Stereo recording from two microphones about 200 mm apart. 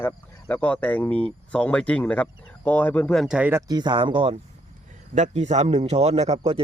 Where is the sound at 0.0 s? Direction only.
10° left (ahead or behind); by 3.6 s 5° right (ahead or behind).